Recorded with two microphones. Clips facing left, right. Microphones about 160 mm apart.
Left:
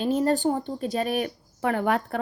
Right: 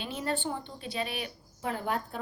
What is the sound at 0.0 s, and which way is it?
Speech, 40° left (ahead or behind).